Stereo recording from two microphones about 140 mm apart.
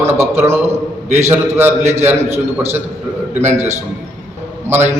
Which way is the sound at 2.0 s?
15° right (ahead or behind).